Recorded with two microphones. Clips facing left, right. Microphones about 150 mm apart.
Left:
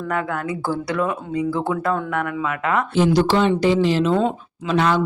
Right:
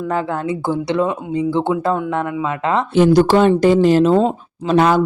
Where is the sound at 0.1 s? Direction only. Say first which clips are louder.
Right 3 dB; 25° right (ahead or behind).